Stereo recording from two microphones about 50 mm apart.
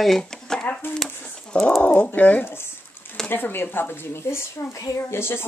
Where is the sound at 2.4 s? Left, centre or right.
Left.